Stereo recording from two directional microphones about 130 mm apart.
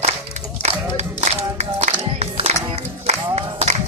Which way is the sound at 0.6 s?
60° right (ahead or behind).